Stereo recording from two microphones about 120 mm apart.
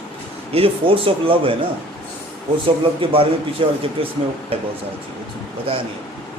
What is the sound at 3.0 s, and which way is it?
Speech, 50° right (ahead or behind).